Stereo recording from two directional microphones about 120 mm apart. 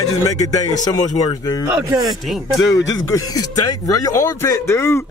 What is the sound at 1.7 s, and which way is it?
Speech, 25° right (ahead or behind).